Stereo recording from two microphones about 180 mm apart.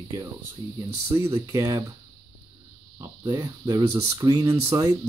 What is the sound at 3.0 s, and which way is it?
Speech, 15° right (ahead or behind).